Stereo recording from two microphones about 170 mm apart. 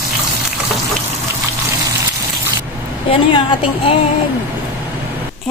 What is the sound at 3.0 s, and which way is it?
Speech, 30° left (ahead or behind).